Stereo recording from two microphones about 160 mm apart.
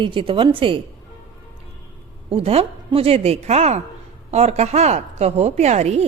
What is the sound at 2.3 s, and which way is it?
A woman's voice, 35° right (ahead or behind).